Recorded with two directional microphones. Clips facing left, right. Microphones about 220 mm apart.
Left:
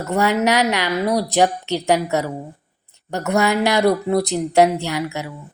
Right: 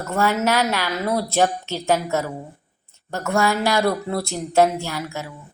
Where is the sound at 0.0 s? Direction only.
15° left (ahead or behind).